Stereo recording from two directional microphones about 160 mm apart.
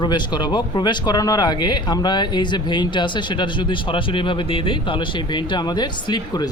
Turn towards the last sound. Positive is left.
turn(degrees=25)  # may be behind; listen again after turning